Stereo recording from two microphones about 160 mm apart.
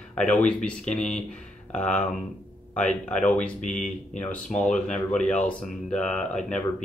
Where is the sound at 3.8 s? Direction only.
50° left (ahead or behind).